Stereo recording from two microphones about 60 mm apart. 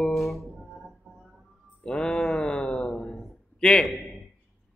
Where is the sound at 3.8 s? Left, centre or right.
Centre.